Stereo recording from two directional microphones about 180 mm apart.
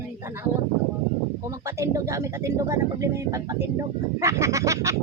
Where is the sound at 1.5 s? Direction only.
15° right (ahead or behind).